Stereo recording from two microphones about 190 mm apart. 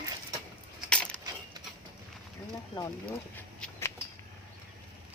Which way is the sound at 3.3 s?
10° left (ahead or behind).